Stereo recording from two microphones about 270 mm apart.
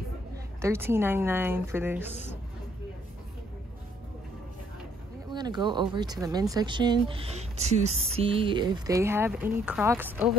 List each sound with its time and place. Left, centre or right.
0.6 s speech: centre
5.3 s speech: centre